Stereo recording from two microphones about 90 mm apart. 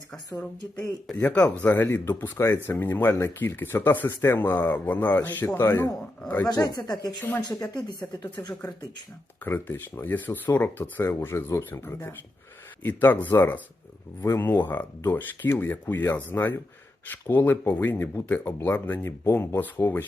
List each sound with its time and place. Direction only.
1.1 s speech: 15° left (ahead or behind); by 5.9 s 30° left (ahead or behind)
6.2 s speech: 20° left (ahead or behind)
6.5 s a woman's voice: 40° left (ahead or behind)
7.2 s speech: 20° left (ahead or behind)
7.7 s a woman's voice: 55° left (ahead or behind)
9.4 s speech: 25° left (ahead or behind)